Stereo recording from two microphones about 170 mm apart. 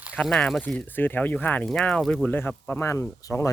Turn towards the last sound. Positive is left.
turn(degrees=15)  # may be behind; listen again after turning